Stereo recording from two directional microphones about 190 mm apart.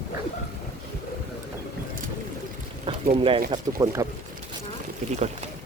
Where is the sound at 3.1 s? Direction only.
30° right (ahead or behind).